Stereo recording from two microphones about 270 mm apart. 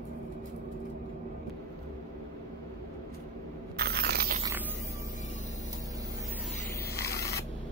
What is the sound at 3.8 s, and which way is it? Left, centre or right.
Crunch, right.